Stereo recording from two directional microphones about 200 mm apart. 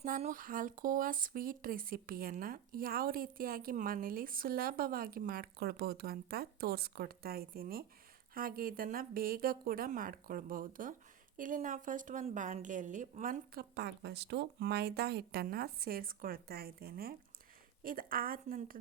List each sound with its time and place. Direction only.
0.0 s speech: 40° right (ahead or behind)